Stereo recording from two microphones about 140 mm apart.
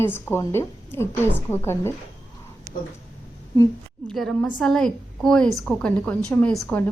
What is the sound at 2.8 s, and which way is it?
Speech, 90° left.